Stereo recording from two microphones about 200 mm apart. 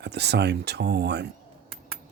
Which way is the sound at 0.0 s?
55° right (ahead or behind).